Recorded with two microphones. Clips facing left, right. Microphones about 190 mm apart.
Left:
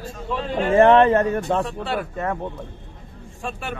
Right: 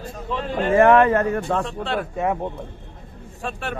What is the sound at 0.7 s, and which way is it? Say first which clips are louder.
Speech: left 1 dB; 25° left (ahead or behind).